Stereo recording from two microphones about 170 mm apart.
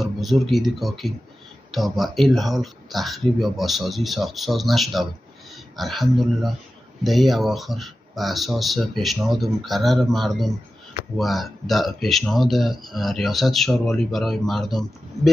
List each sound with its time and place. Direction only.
0.0 s speech: centre (ahead or behind)